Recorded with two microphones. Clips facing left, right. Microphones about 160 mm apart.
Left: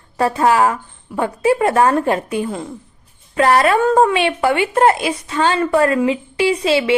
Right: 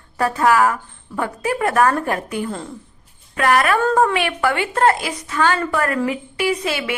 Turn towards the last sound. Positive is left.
turn(degrees=25)  # may be behind; listen again after turning